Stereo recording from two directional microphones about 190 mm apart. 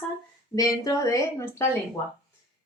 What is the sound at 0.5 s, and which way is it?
Speech, 20° left (ahead or behind).